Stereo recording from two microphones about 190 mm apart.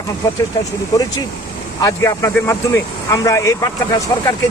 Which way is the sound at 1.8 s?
15° left (ahead or behind).